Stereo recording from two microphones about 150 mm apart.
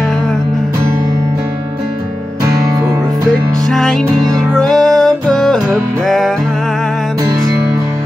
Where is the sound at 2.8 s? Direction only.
25° right (ahead or behind).